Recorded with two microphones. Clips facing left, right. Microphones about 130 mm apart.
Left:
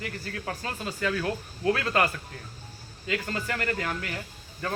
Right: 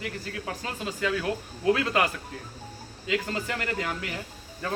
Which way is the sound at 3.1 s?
15° right (ahead or behind).